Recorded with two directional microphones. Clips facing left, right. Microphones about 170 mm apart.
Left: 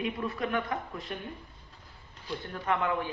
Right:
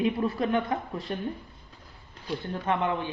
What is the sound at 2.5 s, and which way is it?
Speech, 25° right (ahead or behind).